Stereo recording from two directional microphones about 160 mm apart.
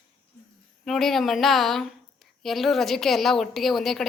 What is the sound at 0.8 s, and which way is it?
A woman's voice, centre (ahead or behind).